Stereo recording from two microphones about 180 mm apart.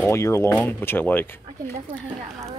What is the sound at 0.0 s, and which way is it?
Speech, 15° left (ahead or behind).